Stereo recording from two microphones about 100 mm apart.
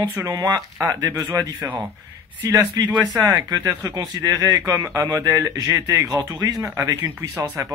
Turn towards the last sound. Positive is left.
turn(degrees=-25)  # may be behind; listen again after turning